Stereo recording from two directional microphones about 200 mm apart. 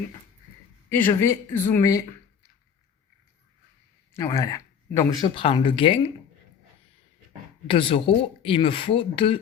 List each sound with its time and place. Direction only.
0.9 s speech: 10° left (ahead or behind)
4.1 s speech: 15° left (ahead or behind)
7.7 s speech: 25° left (ahead or behind)